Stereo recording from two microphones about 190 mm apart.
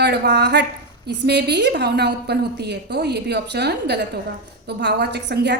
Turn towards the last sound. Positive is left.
turn(degrees=-60)  # may be behind; listen again after turning